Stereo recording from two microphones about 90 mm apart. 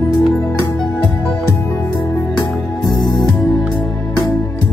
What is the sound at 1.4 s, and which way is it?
Music, 35° left (ahead or behind).